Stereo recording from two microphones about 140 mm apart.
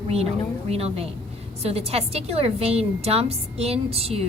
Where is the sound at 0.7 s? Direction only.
45° right (ahead or behind).